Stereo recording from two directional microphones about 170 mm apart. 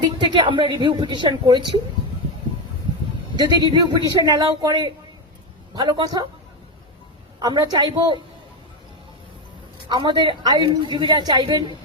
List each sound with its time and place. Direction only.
0.0 s a woman's voice: 30° right (ahead or behind)
3.3 s a woman's voice: 25° right (ahead or behind)
7.3 s a woman's voice: 25° right (ahead or behind)
9.9 s a woman's voice: 25° right (ahead or behind)